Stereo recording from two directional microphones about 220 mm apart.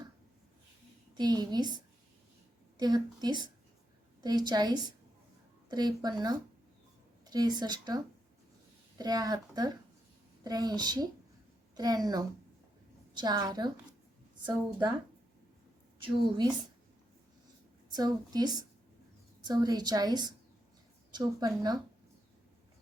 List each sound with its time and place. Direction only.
1.1 s a woman's voice: 20° right (ahead or behind)
16.0 s a woman's voice: 20° right (ahead or behind)
17.9 s a woman's voice: 20° right (ahead or behind)